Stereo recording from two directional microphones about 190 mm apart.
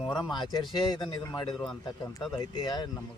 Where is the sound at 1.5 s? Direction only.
Centre (ahead or behind).